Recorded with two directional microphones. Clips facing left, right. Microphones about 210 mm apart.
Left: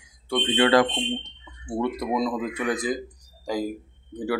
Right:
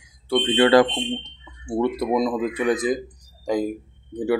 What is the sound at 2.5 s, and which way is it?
Speech, 25° right (ahead or behind).